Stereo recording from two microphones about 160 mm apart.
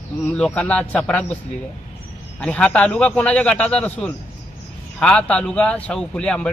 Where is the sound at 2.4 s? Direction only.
5° left (ahead or behind).